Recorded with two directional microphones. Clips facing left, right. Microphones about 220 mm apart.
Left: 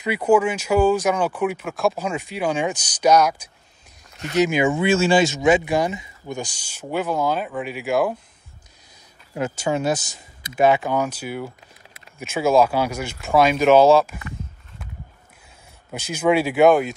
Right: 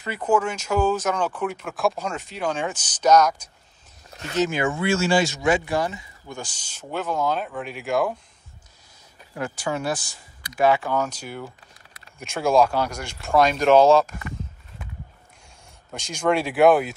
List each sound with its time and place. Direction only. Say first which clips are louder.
0.0 s speech: left 5 dB; 10° left (ahead or behind)
4.1 s a sound: left 4 dB; 35° right (ahead or behind)
4.4 s speech: left 4 dB; 15° left (ahead or behind)
9.3 s speech: left 4 dB; 20° left (ahead or behind); by 14.1 s 5° left (ahead or behind)
15.9 s speech: left 3 dB; 5° left (ahead or behind)